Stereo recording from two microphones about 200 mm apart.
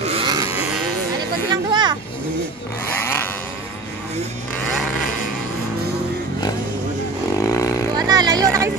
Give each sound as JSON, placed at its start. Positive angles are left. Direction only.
{"t": 0.0, "sound": "livestock", "side_deg": -25}
{"t": 0.6, "sound": "livestock", "side_deg": -5}
{"t": 1.7, "sound": "vehicle", "side_deg": -20}
{"t": 3.0, "sound": "a sound", "side_deg": 10}
{"t": 7.4, "sound": "vehicle", "side_deg": 15}
{"t": 8.1, "sound": "a sound", "side_deg": -20}